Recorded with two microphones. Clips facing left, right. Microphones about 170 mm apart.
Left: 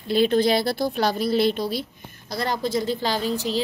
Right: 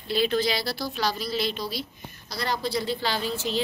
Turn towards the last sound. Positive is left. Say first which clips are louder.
# left 4 dB
turn(degrees=40)  # may be behind; listen again after turning